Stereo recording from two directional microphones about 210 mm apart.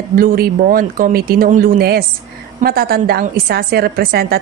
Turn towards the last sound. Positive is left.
turn(degrees=-45)  # may be behind; listen again after turning